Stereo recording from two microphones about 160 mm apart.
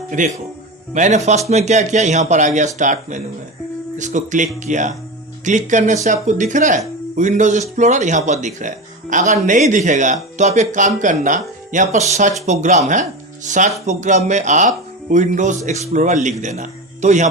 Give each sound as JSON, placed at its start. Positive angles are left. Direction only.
{"t": 0.1, "sound": "speech", "side_deg": -55}